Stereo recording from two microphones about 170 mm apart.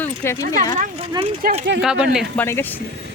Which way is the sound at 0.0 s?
15° left (ahead or behind).